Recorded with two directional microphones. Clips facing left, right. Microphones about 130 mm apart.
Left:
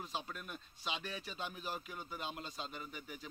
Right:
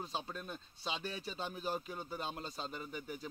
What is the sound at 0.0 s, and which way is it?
A man's voice, 30° right (ahead or behind).